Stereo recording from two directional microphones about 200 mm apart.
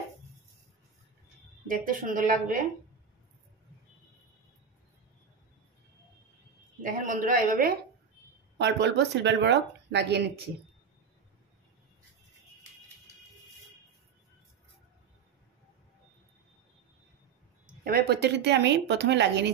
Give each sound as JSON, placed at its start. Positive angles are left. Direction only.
{"t": 1.9, "sound": "a woman's voice", "side_deg": -45}
{"t": 6.8, "sound": "a woman's voice", "side_deg": -40}
{"t": 8.5, "sound": "speech", "side_deg": -60}
{"t": 17.8, "sound": "speech", "side_deg": -50}